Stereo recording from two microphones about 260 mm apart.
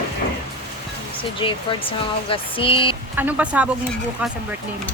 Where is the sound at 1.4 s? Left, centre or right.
Centre.